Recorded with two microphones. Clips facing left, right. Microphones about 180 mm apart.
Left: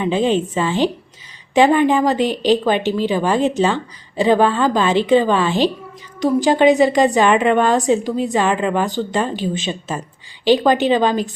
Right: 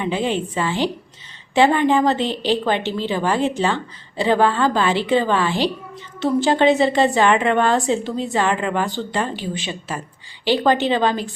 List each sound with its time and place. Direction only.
0.0 s a woman's voice: 20° left (ahead or behind)